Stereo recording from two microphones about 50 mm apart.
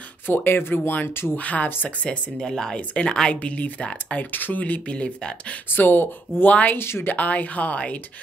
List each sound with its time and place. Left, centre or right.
0.3 s speech: left
1.3 s speech: left
2.0 s speech: centre; by 4.9 s left
4.9 s speech: left
5.7 s speech: left
6.8 s speech: left
7.1 s speech: left